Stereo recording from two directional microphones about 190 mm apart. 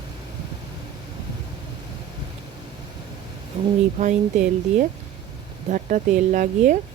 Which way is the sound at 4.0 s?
40° right (ahead or behind).